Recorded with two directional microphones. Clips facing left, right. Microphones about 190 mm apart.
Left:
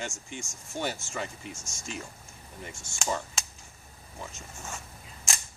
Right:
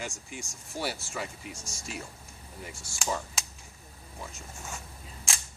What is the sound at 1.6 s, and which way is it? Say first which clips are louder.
Speech: even; 35° right (ahead or behind).